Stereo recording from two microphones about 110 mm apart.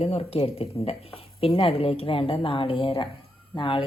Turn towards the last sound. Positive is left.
turn(degrees=50)  # may be behind; listen again after turning